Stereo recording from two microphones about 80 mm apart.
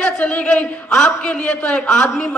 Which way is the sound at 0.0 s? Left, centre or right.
Centre.